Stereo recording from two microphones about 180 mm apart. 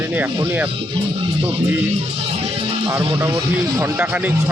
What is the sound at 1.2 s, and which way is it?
Speech, 30° right (ahead or behind).